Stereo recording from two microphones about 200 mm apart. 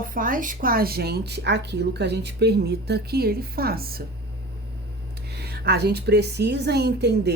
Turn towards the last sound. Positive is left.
turn(degrees=-55)  # may be behind; listen again after turning